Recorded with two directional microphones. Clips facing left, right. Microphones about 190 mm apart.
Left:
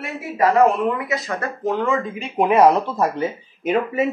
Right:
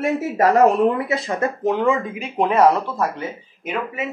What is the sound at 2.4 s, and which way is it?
Speech, 15° left (ahead or behind).